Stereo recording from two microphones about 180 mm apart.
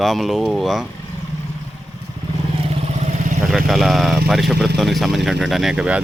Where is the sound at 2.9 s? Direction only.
40° right (ahead or behind).